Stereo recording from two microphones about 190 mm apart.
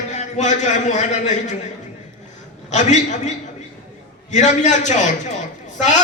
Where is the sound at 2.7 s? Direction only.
40° left (ahead or behind).